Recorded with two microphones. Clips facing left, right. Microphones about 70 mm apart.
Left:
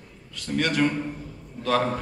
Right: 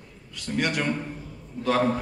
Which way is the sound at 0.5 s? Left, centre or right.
Centre.